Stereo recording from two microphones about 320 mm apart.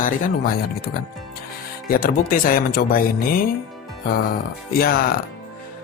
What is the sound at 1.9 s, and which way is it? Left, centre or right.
Speech, left.